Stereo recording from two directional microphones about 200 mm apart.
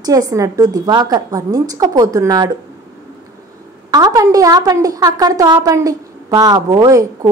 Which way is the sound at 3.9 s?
20° right (ahead or behind).